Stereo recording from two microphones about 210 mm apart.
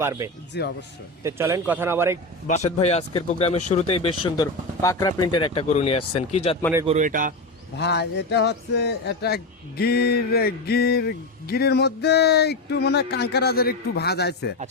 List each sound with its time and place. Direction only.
0.0 s speech: 15° right (ahead or behind)
0.5 s a man's voice: 55° left (ahead or behind)
1.2 s speech: 15° right (ahead or behind)
2.5 s speech: 30° left (ahead or behind)
4.8 s speech: 15° left (ahead or behind)
6.8 s a man's voice: 35° right (ahead or behind)
7.8 s a man's voice: 55° left (ahead or behind)